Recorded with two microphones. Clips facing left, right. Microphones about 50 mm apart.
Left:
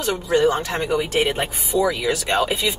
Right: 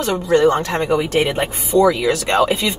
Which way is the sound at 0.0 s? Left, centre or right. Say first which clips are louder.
Right 4 dB; centre.